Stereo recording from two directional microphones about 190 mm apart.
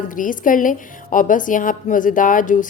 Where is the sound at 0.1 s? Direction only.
45° left (ahead or behind).